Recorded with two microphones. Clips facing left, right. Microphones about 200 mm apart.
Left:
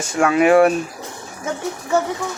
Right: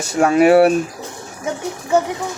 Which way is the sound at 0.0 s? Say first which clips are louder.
Right 3 dB; 40° right (ahead or behind).